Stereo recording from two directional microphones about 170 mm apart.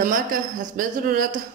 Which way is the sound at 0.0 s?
55° right (ahead or behind).